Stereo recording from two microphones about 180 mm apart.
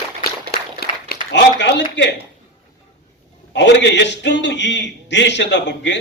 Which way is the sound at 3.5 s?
75° left (ahead or behind).